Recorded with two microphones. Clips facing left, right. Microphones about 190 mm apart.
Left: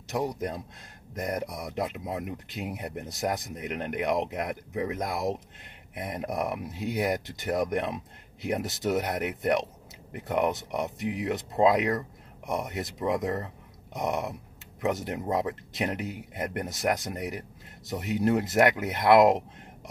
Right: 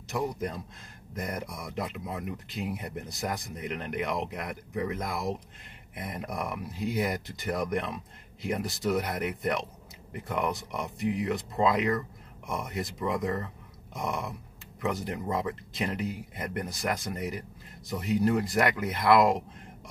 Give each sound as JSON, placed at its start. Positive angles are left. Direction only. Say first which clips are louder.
{"t": 0.1, "sound": "speech", "louder": "left 2 dB", "side_deg": 20}